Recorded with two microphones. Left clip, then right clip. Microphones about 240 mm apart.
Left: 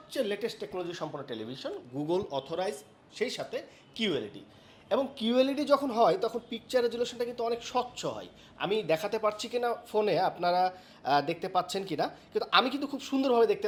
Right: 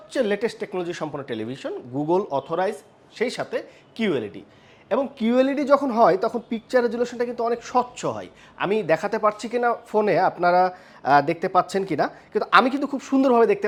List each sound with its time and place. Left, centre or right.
0.1 s speech: right
2.0 s speech: right
2.6 s speech: right
4.0 s speech: right
4.9 s speech: right